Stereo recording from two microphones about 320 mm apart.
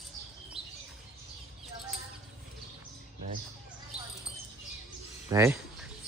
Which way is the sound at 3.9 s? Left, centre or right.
Centre.